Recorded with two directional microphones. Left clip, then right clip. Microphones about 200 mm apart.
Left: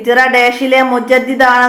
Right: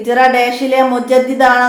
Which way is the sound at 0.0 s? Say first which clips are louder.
Left 2 dB; 20° left (ahead or behind).